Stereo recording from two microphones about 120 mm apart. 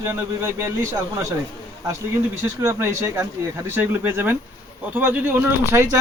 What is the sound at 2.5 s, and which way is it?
Speech, 20° right (ahead or behind).